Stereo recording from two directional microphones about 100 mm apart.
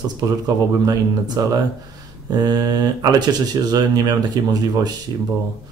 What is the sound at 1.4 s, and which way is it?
Speech, 40° right (ahead or behind).